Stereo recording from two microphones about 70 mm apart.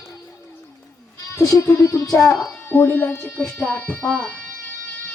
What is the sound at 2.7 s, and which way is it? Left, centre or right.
Speech, left.